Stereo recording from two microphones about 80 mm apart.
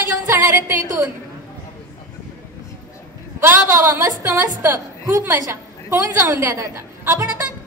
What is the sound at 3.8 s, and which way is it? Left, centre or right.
A woman's voice, right.